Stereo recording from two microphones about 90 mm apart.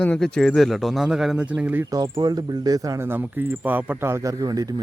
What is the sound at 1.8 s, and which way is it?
A man's voice, 40° right (ahead or behind).